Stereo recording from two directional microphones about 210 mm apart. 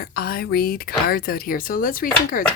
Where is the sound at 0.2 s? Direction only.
45° left (ahead or behind).